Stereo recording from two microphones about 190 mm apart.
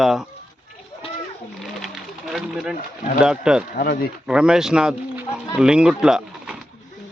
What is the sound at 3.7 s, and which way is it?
Speech, 55° left (ahead or behind).